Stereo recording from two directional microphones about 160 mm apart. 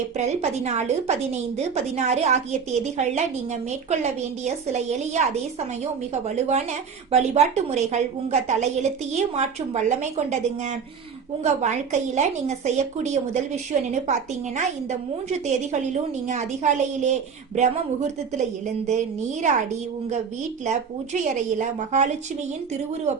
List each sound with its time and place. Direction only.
0.2 s a woman's voice: 45° right (ahead or behind)
11.4 s a woman's voice: 50° right (ahead or behind)
20.7 s a woman's voice: 50° right (ahead or behind)